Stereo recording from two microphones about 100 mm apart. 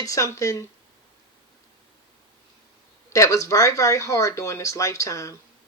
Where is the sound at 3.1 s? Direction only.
30° left (ahead or behind).